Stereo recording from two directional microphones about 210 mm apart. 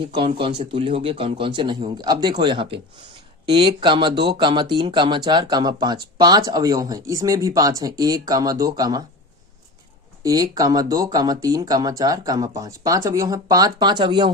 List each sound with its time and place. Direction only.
0.1 s speech: 25° right (ahead or behind)
10.2 s speech: 15° right (ahead or behind)